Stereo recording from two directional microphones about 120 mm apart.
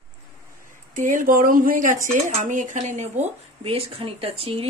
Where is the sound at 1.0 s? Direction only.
90° right; by 3.1 s 70° right (ahead or behind).